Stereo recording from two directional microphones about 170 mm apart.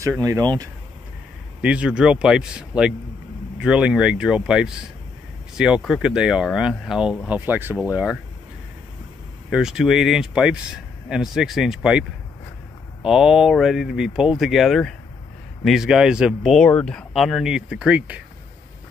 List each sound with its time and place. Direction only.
0.0 s speech: 20° right (ahead or behind)
1.6 s speech: 5° right (ahead or behind)
9.5 s speech: 5° right (ahead or behind)